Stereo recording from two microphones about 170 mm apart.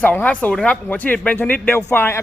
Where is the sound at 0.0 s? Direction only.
10° left (ahead or behind).